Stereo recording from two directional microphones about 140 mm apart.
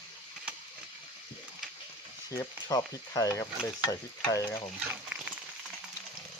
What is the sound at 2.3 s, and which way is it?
Speech, 25° left (ahead or behind).